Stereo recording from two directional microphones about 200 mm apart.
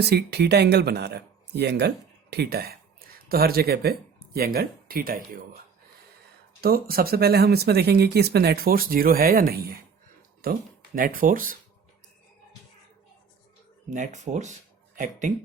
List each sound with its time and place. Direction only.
0.0 s speech: 55° right (ahead or behind)
6.6 s speech: 50° right (ahead or behind)
13.9 s speech: 40° right (ahead or behind)